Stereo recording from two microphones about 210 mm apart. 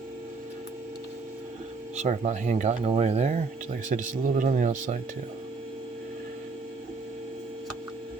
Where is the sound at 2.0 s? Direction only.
35° right (ahead or behind).